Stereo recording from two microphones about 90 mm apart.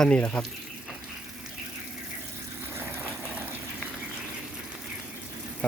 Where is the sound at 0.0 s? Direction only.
10° left (ahead or behind).